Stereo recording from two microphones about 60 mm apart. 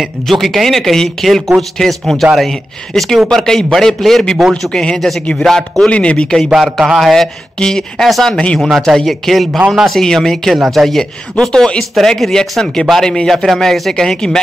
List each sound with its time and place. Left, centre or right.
0.0 s speech: centre
5.9 s speech: centre
6.5 s speech: centre